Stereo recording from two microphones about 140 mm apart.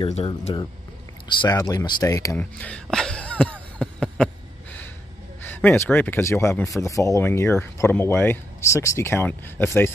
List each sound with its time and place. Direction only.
0.1 s speech: 45° left (ahead or behind)
1.4 s speech: 25° left (ahead or behind)
2.3 s speech: 10° left (ahead or behind)
3.7 s a sound: 5° left (ahead or behind)
5.4 s speech: 15° left (ahead or behind)